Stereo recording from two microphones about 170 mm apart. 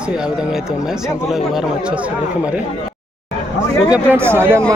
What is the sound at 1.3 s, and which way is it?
Speech, centre (ahead or behind).